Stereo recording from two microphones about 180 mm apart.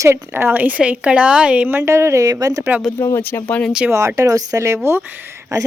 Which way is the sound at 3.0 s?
15° left (ahead or behind).